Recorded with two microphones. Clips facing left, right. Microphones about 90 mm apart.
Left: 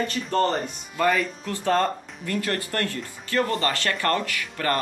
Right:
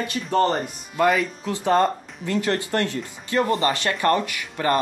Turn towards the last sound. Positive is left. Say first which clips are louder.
# right 3 dB
turn(degrees=-20)  # may be behind; listen again after turning